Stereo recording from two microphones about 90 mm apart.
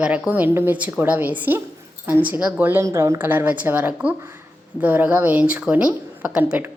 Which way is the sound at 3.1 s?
20° right (ahead or behind).